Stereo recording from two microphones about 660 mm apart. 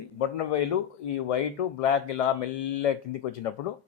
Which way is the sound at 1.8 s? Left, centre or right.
Left.